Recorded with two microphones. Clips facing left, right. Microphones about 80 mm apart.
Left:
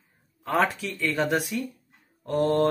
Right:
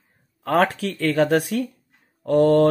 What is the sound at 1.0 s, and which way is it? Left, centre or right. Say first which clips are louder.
Speech: right 6 dB; right.